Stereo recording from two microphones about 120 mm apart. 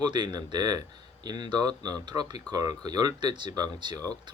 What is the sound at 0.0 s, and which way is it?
Speech, 35° right (ahead or behind).